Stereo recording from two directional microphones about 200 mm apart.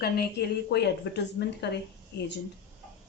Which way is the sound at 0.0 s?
55° left (ahead or behind).